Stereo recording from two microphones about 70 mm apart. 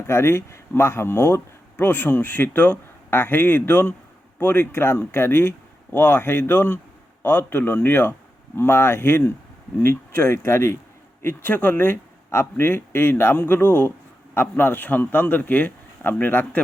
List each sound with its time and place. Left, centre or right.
0.1 s a man's voice: left